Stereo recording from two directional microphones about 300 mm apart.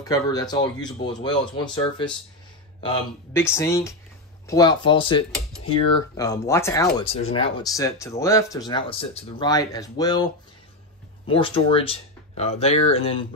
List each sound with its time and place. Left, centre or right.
0.0 s speech: centre
3.3 s speech: centre